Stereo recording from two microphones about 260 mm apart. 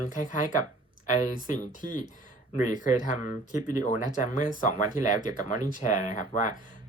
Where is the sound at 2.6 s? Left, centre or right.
Left.